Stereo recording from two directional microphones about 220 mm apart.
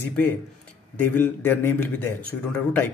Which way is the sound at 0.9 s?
10° left (ahead or behind).